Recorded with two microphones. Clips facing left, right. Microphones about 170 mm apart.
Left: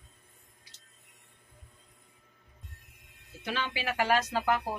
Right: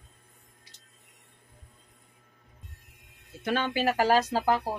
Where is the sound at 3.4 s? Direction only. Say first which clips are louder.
Right 7 dB; 50° right (ahead or behind); by 4.6 s 35° right (ahead or behind).